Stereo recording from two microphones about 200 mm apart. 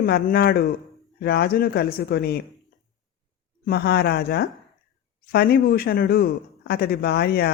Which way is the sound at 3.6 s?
50° left (ahead or behind).